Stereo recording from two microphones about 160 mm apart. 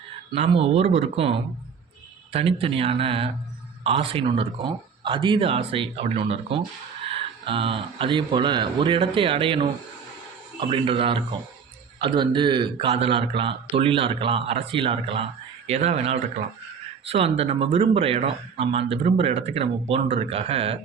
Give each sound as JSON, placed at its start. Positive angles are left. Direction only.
{"t": 0.3, "sound": "a man's voice", "side_deg": -40}